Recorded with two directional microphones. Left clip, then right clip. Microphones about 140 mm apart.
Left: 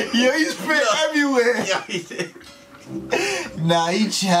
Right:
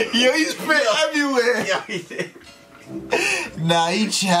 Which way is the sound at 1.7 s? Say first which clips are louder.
Even; 5° left (ahead or behind).